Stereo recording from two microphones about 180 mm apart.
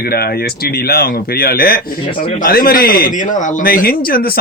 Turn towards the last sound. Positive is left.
turn(degrees=55)  # may be behind; listen again after turning